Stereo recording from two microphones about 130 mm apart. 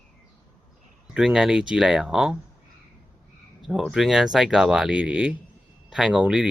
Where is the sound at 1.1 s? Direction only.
5° right (ahead or behind).